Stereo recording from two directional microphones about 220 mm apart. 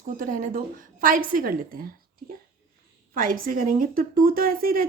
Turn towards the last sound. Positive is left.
turn(degrees=-40)  # may be behind; listen again after turning